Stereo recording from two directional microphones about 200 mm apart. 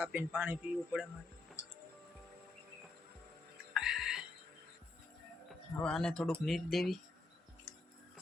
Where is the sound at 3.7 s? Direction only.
Centre (ahead or behind).